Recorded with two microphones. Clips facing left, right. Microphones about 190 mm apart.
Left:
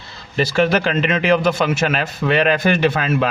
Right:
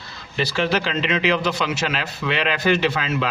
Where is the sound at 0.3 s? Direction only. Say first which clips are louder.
Left 5 dB; 50° left (ahead or behind).